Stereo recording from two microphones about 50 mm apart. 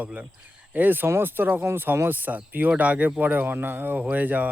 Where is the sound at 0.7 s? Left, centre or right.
Right.